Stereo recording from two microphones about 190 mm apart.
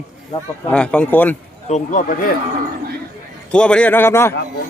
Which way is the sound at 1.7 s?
40° left (ahead or behind).